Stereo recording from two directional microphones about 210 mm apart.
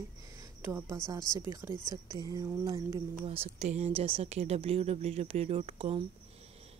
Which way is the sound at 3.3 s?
30° right (ahead or behind).